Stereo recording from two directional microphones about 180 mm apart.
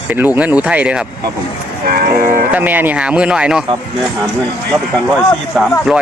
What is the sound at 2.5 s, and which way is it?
Speech, 10° right (ahead or behind).